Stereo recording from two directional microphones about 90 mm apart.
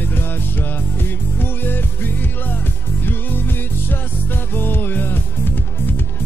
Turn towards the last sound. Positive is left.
turn(degrees=20)  # may be behind; listen again after turning